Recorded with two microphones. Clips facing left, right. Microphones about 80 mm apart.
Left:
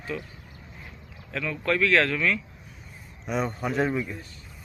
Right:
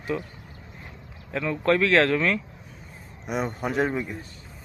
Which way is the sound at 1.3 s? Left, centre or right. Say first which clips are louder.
Right 4 dB; right.